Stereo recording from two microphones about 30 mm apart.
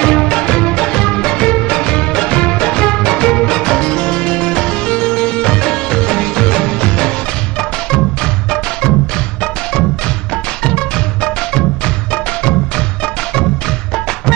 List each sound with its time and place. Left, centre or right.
0.0 s music: left
10.3 s music: left